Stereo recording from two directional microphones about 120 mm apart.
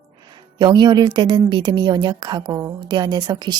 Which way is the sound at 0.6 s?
35° right (ahead or behind).